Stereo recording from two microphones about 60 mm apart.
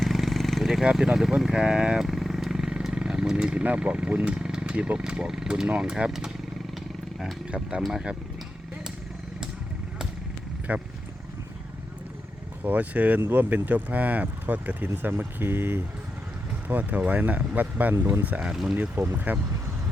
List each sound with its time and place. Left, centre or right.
0.0 s a sound: centre
0.9 s speech: centre
2.0 s vehicle: centre
2.8 s speech: centre
7.8 s speech: centre
10.7 s speech: right
12.6 s speech: right
16.6 s speech: right
17.9 s speech: right
18.3 s speech: right
18.5 s speech: centre
18.9 s speech: right